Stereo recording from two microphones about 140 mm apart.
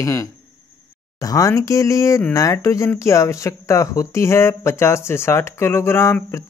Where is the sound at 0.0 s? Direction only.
20° left (ahead or behind).